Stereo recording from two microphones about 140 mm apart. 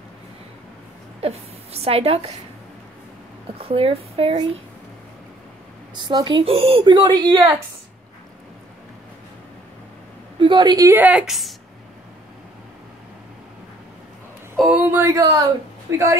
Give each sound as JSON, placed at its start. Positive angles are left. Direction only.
{"t": 1.2, "sound": "a woman's voice", "side_deg": -45}
{"t": 3.5, "sound": "a woman's voice", "side_deg": -40}
{"t": 5.9, "sound": "a woman's voice", "side_deg": -30}
{"t": 10.4, "sound": "a woman's voice", "side_deg": -30}
{"t": 10.9, "sound": "speech", "side_deg": -10}
{"t": 14.7, "sound": "a sound", "side_deg": -10}